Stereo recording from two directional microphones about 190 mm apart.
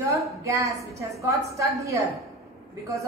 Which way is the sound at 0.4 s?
15° right (ahead or behind).